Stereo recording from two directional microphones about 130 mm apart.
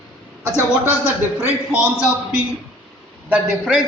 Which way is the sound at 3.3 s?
5° right (ahead or behind).